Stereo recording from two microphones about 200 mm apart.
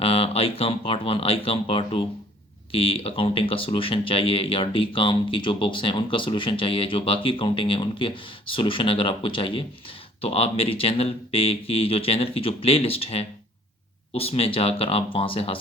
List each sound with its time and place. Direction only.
0.0 s speech: 30° left (ahead or behind)